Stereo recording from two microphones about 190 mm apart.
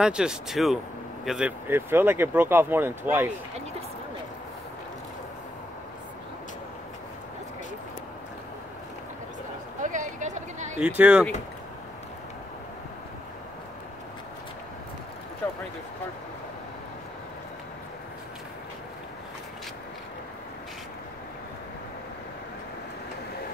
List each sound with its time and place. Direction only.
0.0 s speech: 5° right (ahead or behind)
9.8 s a sound: 40° right (ahead or behind)
10.8 s speech: 5° right (ahead or behind)